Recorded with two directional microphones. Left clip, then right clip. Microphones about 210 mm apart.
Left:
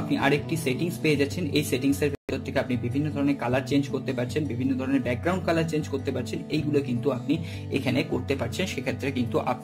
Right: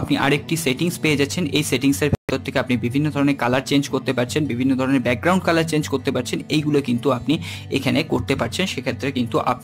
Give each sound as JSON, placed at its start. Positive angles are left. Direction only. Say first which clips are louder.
{"t": 0.1, "sound": "speech", "louder": "right 5 dB", "side_deg": -30}